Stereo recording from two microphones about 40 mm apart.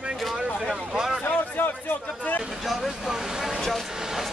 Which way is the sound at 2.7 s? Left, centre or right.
Centre.